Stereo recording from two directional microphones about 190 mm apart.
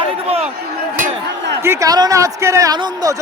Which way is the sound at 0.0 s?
30° right (ahead or behind).